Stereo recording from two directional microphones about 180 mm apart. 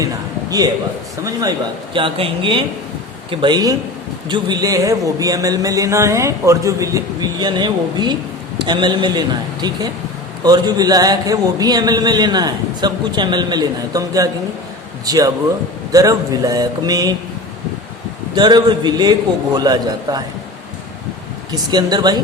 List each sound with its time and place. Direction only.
1.2 s a man's voice: 20° right (ahead or behind)
18.3 s a man's voice: 25° right (ahead or behind)
21.5 s a man's voice: 20° right (ahead or behind)